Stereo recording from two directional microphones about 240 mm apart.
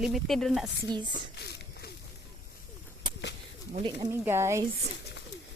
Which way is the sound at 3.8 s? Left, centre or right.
Centre.